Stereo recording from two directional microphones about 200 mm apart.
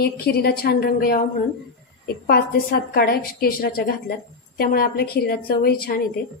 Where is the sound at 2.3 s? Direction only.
50° left (ahead or behind).